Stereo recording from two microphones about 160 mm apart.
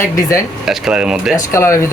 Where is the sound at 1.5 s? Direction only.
15° left (ahead or behind).